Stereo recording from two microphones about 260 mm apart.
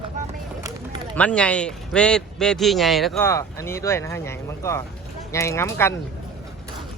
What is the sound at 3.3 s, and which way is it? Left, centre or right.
Speech, centre.